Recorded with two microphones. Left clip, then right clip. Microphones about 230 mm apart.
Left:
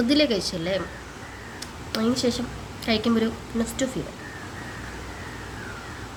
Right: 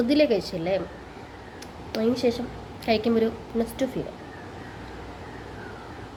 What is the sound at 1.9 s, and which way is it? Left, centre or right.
A woman's voice, centre.